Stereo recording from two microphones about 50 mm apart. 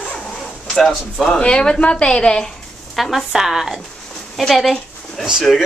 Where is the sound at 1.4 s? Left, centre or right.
Centre.